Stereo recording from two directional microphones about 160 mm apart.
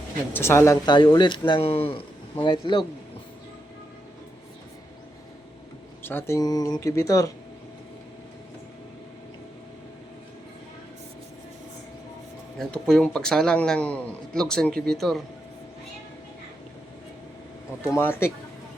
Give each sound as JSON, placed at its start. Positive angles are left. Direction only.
{"t": 0.3, "sound": "speech", "side_deg": 15}
{"t": 0.9, "sound": "speech", "side_deg": 30}
{"t": 6.0, "sound": "speech", "side_deg": 15}
{"t": 12.5, "sound": "a man's voice", "side_deg": 5}
{"t": 17.9, "sound": "speech", "side_deg": 15}